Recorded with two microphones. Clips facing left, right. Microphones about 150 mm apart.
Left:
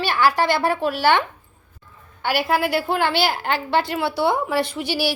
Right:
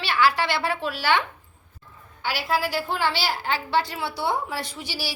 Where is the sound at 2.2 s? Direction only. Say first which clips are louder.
Left 5 dB; 60° left (ahead or behind).